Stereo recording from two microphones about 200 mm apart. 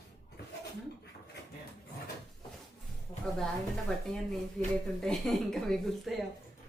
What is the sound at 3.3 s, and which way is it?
Speech, 5° left (ahead or behind).